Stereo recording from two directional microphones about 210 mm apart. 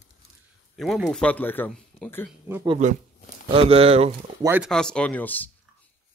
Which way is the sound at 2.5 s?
20° right (ahead or behind).